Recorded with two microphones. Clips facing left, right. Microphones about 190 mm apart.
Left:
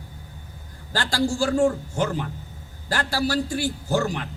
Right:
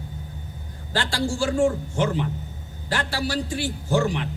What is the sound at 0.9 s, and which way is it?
A man's voice, 40° left (ahead or behind).